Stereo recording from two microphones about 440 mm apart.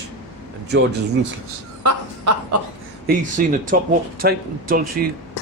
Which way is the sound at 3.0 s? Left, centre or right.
Centre.